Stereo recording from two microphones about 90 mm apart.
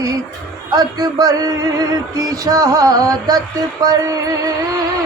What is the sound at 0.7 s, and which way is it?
Music, 45° right (ahead or behind).